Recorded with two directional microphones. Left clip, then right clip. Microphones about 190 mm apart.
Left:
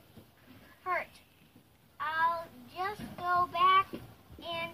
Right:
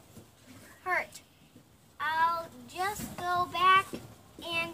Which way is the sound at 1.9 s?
10° right (ahead or behind).